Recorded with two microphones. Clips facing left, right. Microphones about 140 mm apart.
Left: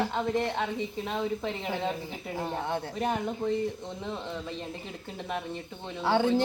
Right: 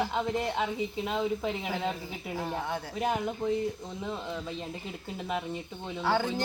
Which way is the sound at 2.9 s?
5° right (ahead or behind).